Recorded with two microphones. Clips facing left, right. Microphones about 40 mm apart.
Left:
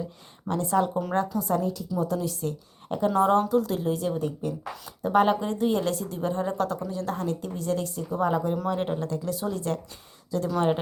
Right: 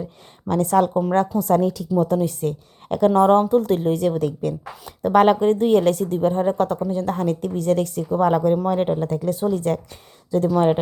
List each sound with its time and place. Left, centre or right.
0.4 s a woman's voice: right
2.0 s a woman's voice: right
3.2 s a woman's voice: right
4.9 s a woman's voice: right
6.1 s a woman's voice: right
8.6 s a woman's voice: right